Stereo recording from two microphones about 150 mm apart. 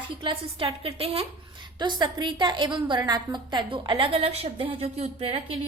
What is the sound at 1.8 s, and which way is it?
A woman's voice, 30° right (ahead or behind).